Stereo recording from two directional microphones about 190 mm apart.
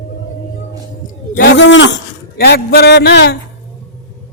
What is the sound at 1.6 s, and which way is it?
Speech, 75° left (ahead or behind).